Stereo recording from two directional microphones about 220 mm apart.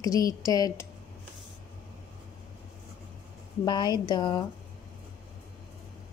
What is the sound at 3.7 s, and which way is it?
Speech, 20° left (ahead or behind).